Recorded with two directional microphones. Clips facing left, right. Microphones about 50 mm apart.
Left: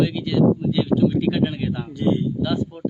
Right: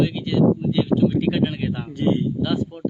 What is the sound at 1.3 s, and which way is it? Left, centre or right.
Speech, right.